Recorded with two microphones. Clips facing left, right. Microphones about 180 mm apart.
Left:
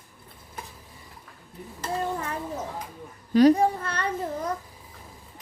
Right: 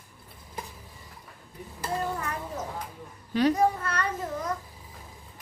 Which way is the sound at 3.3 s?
35° left (ahead or behind).